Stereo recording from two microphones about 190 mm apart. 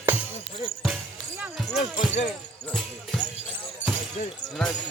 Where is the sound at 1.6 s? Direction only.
35° left (ahead or behind).